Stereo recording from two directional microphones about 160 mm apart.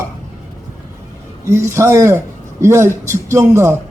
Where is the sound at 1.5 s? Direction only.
15° right (ahead or behind).